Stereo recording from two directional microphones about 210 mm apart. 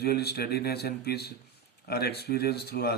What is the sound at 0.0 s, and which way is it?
Speech, 50° left (ahead or behind).